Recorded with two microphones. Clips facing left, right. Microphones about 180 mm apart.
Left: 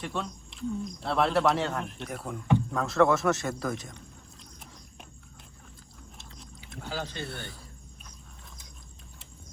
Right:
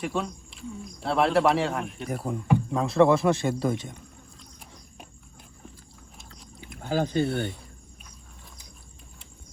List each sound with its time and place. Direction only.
0.0 s speech: centre (ahead or behind)
2.0 s speech: 35° right (ahead or behind)
6.1 s a sound: centre (ahead or behind)
6.8 s speech: 50° right (ahead or behind)